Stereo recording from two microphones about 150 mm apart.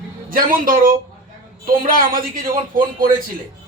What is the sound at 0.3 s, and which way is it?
A man's voice, 70° right (ahead or behind).